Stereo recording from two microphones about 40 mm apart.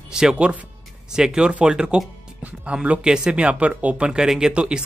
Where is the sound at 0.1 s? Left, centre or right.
Centre.